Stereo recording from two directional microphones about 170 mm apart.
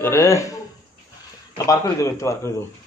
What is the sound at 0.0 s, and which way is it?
A man's voice, 15° left (ahead or behind).